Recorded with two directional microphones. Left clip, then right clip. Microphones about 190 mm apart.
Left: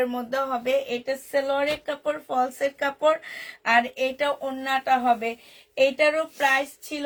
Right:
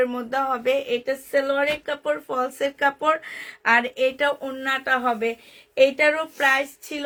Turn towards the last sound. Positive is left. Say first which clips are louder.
# right 1 dB
turn(degrees=-45)  # may be behind; listen again after turning